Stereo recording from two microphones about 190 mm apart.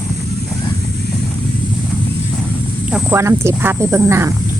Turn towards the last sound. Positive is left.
turn(degrees=-15)  # may be behind; listen again after turning